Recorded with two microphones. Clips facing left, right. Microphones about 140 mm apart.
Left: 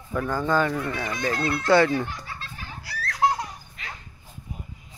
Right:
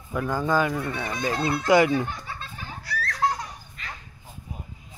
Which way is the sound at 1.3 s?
25° right (ahead or behind).